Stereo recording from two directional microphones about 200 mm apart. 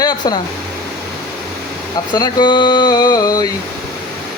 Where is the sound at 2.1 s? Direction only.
20° left (ahead or behind).